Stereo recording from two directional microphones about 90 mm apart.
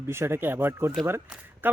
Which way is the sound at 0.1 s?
30° right (ahead or behind).